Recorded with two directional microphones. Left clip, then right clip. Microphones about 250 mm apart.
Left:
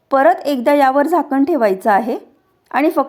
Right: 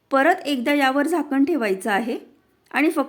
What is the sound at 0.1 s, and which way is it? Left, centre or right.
A woman's voice, centre.